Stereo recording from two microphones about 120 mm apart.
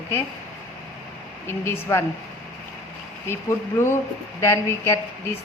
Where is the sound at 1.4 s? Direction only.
20° left (ahead or behind).